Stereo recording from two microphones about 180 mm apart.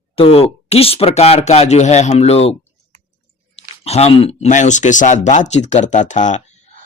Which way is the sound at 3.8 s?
35° left (ahead or behind).